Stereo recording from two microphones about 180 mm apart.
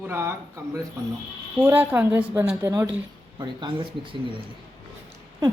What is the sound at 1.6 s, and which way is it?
A woman's voice, 10° right (ahead or behind).